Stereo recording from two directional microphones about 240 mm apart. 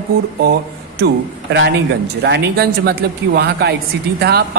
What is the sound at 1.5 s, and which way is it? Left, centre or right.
Speech, right.